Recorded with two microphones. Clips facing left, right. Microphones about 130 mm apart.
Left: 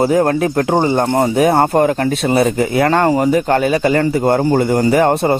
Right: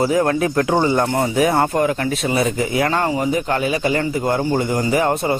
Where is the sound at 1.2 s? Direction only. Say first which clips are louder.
Left 6 dB; 55° left (ahead or behind).